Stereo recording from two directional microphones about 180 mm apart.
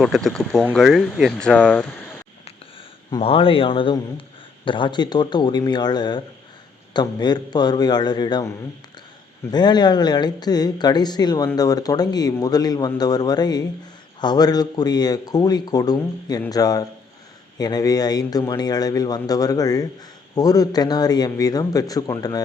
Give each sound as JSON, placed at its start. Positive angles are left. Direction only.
{"t": 0.0, "sound": "speech", "side_deg": 0}
{"t": 3.1, "sound": "a man's voice", "side_deg": 30}